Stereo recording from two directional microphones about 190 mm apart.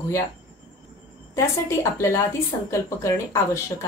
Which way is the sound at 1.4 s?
15° left (ahead or behind).